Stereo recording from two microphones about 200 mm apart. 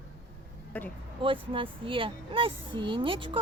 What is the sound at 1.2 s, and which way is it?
Speech, 25° right (ahead or behind).